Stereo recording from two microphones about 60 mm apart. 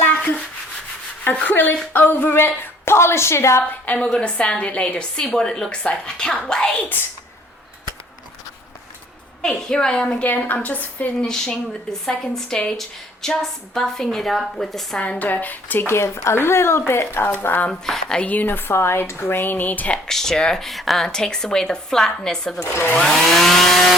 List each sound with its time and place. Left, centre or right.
0.2 s rub: left
1.2 s a woman's voice: left
3.7 s a woman's voice: left; by 6.7 s centre
9.4 s a woman's voice: centre; by 11.1 s left
11.2 s a woman's voice: centre
14.9 s a woman's voice: left
15.9 s speech: left
17.7 s speech: centre
18.2 s a woman's voice: left
18.7 s speech: left
20.1 s speech: centre